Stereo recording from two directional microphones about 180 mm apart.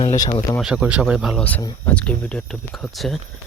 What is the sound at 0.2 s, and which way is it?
Speech, 30° left (ahead or behind).